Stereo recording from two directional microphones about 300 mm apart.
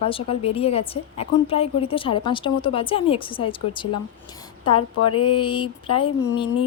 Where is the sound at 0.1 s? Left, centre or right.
Centre.